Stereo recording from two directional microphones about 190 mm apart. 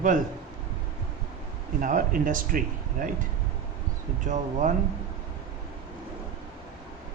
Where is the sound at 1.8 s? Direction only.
45° right (ahead or behind).